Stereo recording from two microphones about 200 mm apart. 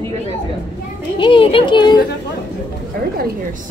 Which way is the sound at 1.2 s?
25° left (ahead or behind).